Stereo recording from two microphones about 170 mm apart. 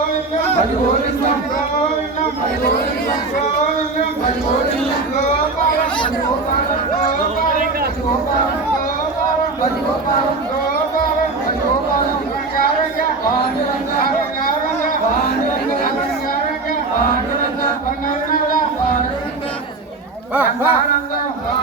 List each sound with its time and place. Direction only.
14.0 s chatter: 55° left (ahead or behind)
20.3 s speech: 10° right (ahead or behind)